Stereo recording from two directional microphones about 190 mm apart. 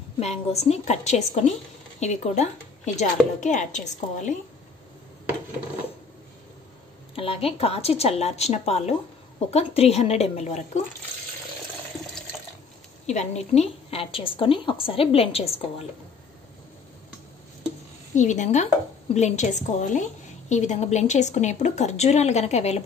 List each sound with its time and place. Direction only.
0.2 s a woman's voice: 35° left (ahead or behind)
7.2 s a woman's voice: 30° left (ahead or behind)
13.0 s a woman's voice: 35° left (ahead or behind)
18.1 s a woman's voice: 40° left (ahead or behind)